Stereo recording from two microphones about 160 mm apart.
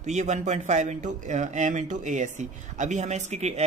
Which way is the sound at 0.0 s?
45° right (ahead or behind).